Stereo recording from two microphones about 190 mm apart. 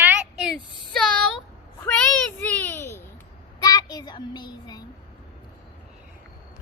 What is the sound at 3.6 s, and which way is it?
Child singing, 20° left (ahead or behind).